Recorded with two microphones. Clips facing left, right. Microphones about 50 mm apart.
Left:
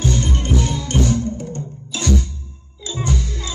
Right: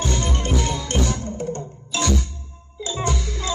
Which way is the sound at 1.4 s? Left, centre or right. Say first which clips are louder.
Right 1 dB; right.